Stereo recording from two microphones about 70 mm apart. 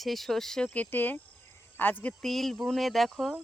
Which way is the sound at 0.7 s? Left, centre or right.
Left.